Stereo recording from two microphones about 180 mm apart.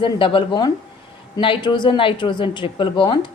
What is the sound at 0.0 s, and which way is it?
A woman's voice, 30° left (ahead or behind).